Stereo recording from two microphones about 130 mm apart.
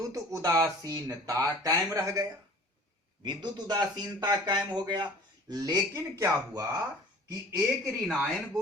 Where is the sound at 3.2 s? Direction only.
35° right (ahead or behind).